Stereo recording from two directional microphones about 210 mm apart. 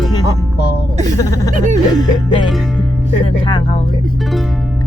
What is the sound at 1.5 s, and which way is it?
Music, 35° right (ahead or behind).